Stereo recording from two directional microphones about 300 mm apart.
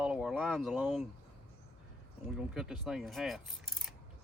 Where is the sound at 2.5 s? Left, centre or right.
Centre.